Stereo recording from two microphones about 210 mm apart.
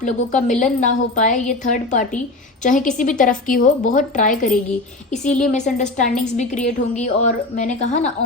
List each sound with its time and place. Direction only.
0.0 s a woman's voice: 35° left (ahead or behind)